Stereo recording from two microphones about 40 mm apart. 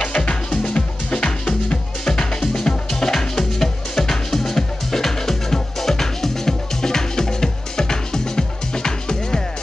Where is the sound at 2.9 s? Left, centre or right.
Centre.